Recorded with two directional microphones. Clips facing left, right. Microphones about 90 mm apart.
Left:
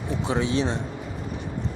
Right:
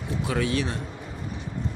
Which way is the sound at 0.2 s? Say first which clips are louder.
Left 2 dB; 25° left (ahead or behind).